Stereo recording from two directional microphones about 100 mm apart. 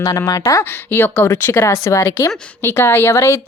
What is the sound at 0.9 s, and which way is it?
A woman's voice, 20° left (ahead or behind).